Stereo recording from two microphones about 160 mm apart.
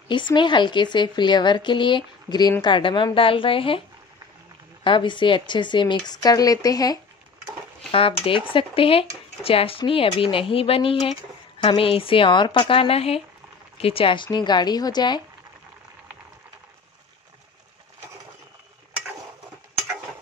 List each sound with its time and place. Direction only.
0.1 s speech: 30° left (ahead or behind)
4.8 s speech: 30° left (ahead or behind)
7.9 s speech: 35° left (ahead or behind)